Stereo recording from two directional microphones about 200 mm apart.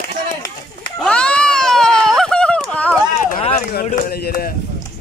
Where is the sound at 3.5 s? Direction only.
45° left (ahead or behind).